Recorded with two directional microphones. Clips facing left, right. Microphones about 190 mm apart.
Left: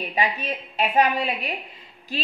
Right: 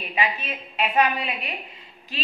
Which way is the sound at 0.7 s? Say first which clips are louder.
Left 1 dB; 35° left (ahead or behind).